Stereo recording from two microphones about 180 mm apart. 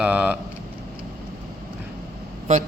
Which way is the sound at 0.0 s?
5° right (ahead or behind).